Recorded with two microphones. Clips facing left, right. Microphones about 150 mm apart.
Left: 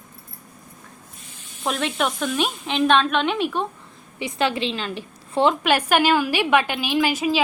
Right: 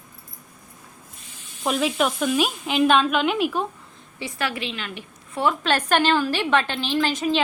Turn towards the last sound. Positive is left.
turn(degrees=10)  # may be behind; listen again after turning